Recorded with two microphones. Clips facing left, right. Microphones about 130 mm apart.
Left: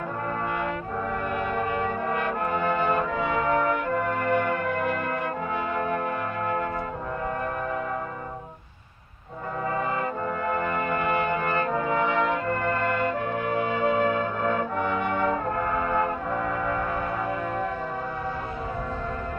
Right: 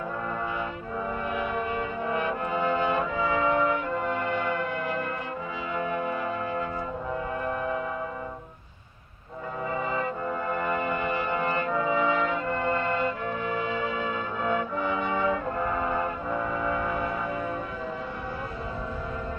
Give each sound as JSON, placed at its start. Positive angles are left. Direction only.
{"t": 1.4, "sound": "brass instrument", "side_deg": 55}
{"t": 5.7, "sound": "music", "side_deg": 55}
{"t": 10.8, "sound": "brass instrument", "side_deg": 50}